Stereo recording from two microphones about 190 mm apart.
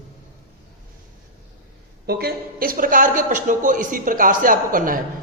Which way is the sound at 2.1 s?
55° right (ahead or behind).